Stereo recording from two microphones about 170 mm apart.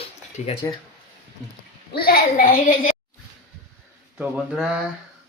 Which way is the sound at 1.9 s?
65° left (ahead or behind).